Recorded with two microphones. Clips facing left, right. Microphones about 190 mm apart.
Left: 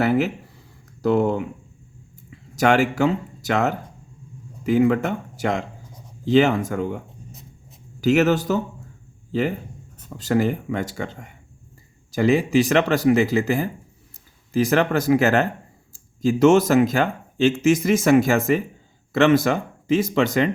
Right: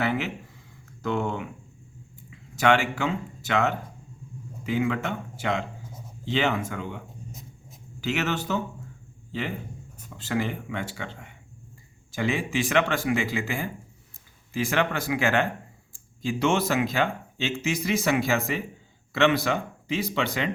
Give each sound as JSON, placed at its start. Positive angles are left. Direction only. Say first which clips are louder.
{"t": 0.0, "sound": "a sound", "louder": "left 8 dB", "side_deg": 40}
{"t": 1.0, "sound": "speech", "louder": "left 8 dB", "side_deg": 35}
{"t": 8.0, "sound": "speech", "louder": "left 10 dB", "side_deg": 40}
{"t": 10.1, "sound": "speech", "louder": "left 8 dB", "side_deg": 40}